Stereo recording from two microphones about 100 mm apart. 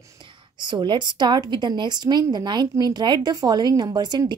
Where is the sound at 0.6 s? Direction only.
50° right (ahead or behind).